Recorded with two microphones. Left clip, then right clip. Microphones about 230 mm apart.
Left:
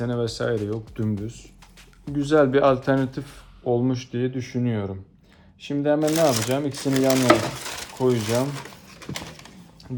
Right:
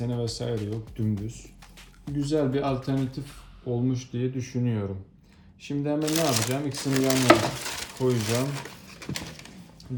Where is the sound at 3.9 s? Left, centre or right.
Centre.